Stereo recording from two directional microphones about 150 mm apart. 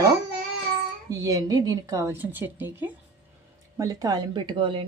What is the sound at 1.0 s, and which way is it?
A woman's voice, 25° right (ahead or behind).